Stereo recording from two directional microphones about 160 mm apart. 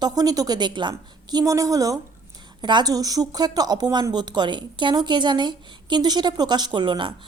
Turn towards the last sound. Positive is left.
turn(degrees=-30)  # may be behind; listen again after turning